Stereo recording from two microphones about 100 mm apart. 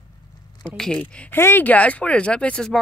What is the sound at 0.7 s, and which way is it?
Speech, 10° left (ahead or behind).